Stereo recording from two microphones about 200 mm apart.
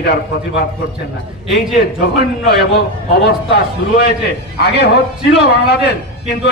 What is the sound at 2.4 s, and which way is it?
A man's voice, 55° left (ahead or behind).